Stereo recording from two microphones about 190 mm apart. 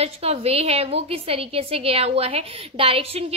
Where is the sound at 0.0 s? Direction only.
35° right (ahead or behind).